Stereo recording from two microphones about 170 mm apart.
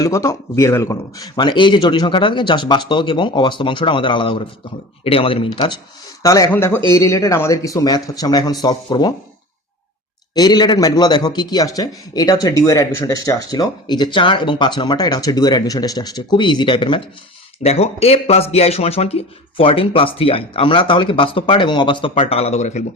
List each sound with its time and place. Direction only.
0.0 s a man's voice: 20° left (ahead or behind)
10.3 s speech: 25° left (ahead or behind); by 22.8 s 40° left (ahead or behind)